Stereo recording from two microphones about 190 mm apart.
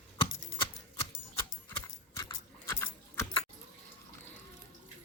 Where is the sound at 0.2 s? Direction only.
25° left (ahead or behind).